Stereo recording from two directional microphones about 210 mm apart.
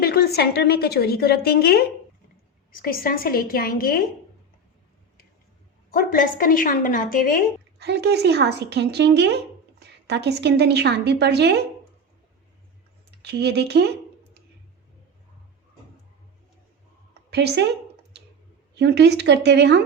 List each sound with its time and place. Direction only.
0.0 s a woman's voice: 50° left (ahead or behind)
5.9 s a woman's voice: 40° left (ahead or behind)
7.8 s a woman's voice: 50° right (ahead or behind)
13.2 s a woman's voice: 50° right (ahead or behind)
17.3 s a woman's voice: 50° right (ahead or behind)
18.7 s a woman's voice: 55° right (ahead or behind)